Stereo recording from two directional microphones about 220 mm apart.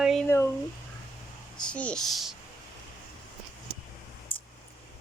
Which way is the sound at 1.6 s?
5° left (ahead or behind).